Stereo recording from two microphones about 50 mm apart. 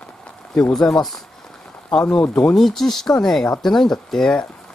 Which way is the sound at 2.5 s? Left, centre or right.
Centre.